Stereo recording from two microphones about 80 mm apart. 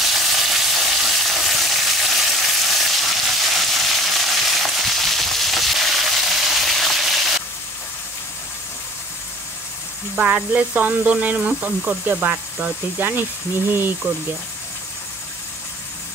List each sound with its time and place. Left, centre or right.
0.0 s frying: centre
10.1 s speech: centre